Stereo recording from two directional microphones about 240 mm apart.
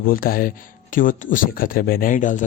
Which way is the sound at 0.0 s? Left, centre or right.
Left.